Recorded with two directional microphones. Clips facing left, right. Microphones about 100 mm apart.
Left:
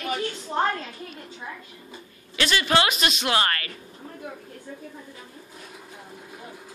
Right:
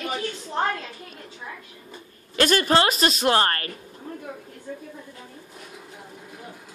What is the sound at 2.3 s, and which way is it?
A woman's voice, 45° right (ahead or behind).